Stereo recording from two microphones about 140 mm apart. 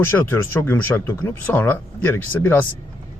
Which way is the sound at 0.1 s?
15° left (ahead or behind).